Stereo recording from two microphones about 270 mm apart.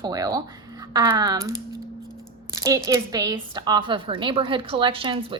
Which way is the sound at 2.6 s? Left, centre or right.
Centre.